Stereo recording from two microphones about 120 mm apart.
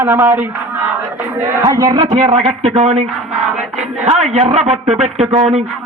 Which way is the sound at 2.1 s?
70° right (ahead or behind).